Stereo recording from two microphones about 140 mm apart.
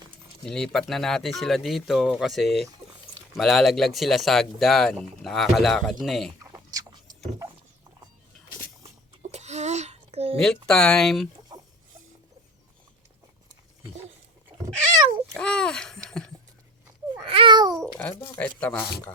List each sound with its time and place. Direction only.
0.4 s speech: 5° left (ahead or behind)
6.4 s a sound: 25° right (ahead or behind)
9.3 s a sound: 55° right (ahead or behind)
10.4 s speech: 5° left (ahead or behind)
14.5 s cat: 45° right (ahead or behind)
15.3 s babbling: 5° left (ahead or behind)
17.2 s babbling: 35° right (ahead or behind)
17.7 s babbling: 5° left (ahead or behind)
18.2 s speech: 10° left (ahead or behind)